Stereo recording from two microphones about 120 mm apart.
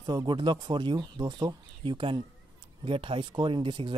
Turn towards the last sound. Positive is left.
turn(degrees=-45)  # may be behind; listen again after turning